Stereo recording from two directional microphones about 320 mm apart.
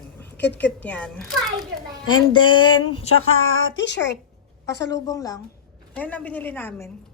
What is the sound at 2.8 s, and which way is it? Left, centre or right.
A woman's voice, left.